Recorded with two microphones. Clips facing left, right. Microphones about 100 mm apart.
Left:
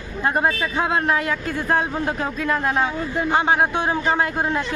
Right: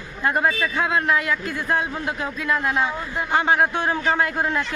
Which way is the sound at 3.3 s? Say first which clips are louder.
Even; 25° left (ahead or behind).